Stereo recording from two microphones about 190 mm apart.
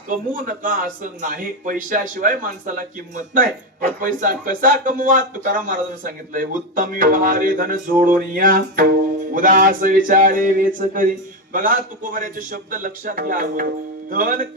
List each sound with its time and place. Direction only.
0.1 s speech: 45° right (ahead or behind)
4.0 s speech: 45° right (ahead or behind)